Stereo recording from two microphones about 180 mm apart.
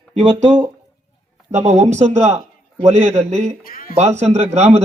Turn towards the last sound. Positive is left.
turn(degrees=-35)  # may be behind; listen again after turning